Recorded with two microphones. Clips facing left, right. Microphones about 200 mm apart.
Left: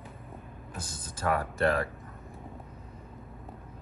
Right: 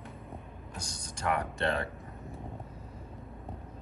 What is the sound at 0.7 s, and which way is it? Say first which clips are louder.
Speech: left 2 dB; 5° left (ahead or behind).